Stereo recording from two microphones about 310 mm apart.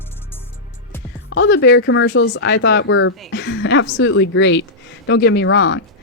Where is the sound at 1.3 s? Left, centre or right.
Left.